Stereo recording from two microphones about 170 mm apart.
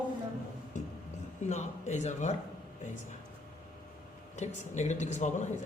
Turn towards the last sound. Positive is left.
turn(degrees=45)  # may be behind; listen again after turning